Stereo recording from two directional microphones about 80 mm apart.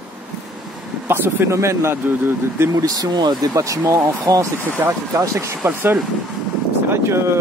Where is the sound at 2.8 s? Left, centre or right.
Right.